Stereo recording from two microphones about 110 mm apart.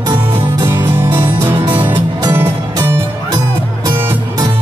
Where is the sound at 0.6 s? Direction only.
20° right (ahead or behind).